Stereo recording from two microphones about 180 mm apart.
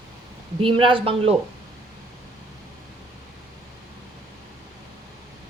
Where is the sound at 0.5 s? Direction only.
30° right (ahead or behind).